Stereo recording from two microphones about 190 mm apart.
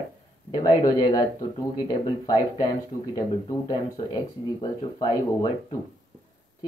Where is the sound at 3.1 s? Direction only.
20° left (ahead or behind).